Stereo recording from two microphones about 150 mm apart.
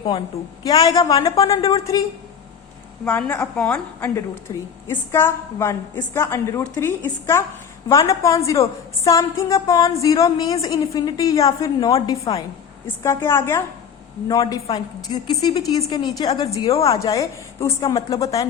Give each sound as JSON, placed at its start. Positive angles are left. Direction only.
{"t": 0.6, "sound": "a woman's voice", "side_deg": 25}
{"t": 3.0, "sound": "a woman's voice", "side_deg": 10}